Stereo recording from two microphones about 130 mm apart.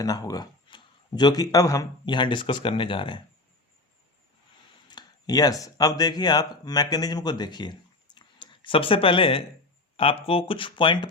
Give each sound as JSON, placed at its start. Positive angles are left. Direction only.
{"t": 0.0, "sound": "speech", "side_deg": 30}
{"t": 4.9, "sound": "speech", "side_deg": 30}